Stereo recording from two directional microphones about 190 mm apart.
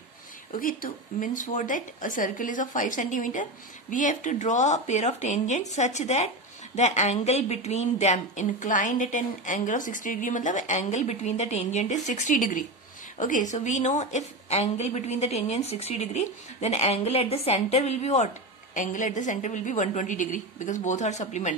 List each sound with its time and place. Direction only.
0.6 s a woman's voice: 45° left (ahead or behind)